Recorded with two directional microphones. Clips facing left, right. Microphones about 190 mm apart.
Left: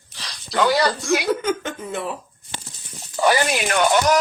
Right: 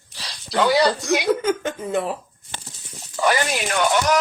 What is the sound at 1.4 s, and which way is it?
Speech, 30° right (ahead or behind).